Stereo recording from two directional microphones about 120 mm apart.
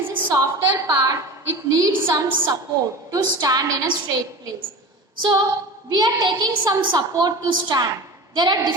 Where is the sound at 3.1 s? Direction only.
30° right (ahead or behind).